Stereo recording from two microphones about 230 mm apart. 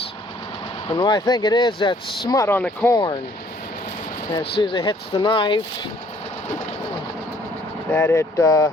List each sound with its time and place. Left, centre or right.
0.9 s speech: left
4.6 s speech: left
7.9 s speech: centre